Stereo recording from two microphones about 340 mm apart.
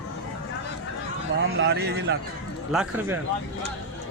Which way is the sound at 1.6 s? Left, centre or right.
Right.